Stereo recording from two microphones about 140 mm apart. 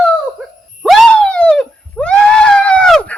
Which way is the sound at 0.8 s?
Centre (ahead or behind).